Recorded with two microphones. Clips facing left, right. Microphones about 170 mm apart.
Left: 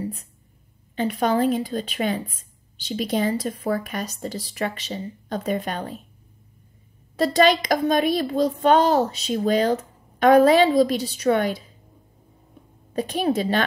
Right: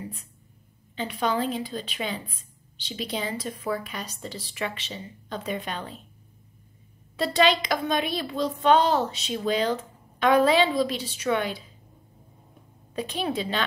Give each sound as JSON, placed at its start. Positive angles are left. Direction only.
{"t": 0.0, "sound": "a sound", "side_deg": 40}
{"t": 0.9, "sound": "a woman's voice", "side_deg": 45}
{"t": 7.2, "sound": "a woman's voice", "side_deg": 45}
{"t": 12.9, "sound": "a woman's voice", "side_deg": 45}